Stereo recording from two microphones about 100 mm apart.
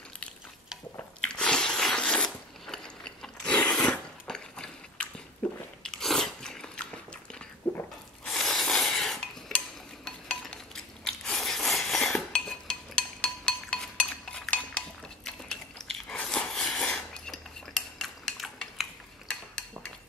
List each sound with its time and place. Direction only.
1.2 s crunch: 5° left (ahead or behind)
5.4 s biting: 15° left (ahead or behind)
7.7 s a sound: 20° left (ahead or behind)
8.3 s rub: 5° left (ahead or behind)
10.0 s a sound: 5° left (ahead or behind)
15.2 s biting: 5° left (ahead or behind)